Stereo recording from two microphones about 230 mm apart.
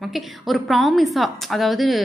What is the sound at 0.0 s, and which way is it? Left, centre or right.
A woman's voice, centre.